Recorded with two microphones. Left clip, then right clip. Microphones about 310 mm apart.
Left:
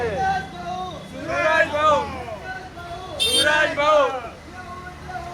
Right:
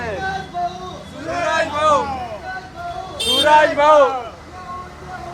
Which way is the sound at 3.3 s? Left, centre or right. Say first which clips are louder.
Right 7 dB; right.